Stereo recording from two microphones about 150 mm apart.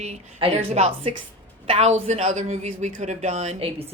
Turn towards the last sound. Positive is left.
turn(degrees=-45)  # may be behind; listen again after turning